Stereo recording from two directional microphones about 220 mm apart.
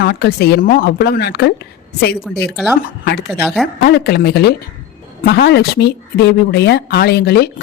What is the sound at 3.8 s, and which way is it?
Speech, 45° left (ahead or behind).